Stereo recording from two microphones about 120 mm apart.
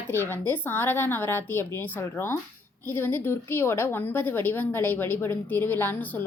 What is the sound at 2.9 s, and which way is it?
A woman's voice, 15° left (ahead or behind).